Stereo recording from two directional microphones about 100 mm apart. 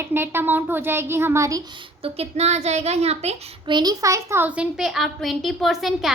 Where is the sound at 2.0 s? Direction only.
90° right.